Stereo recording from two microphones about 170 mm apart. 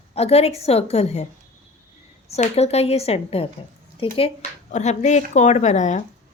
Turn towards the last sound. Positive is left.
turn(degrees=45)  # may be behind; listen again after turning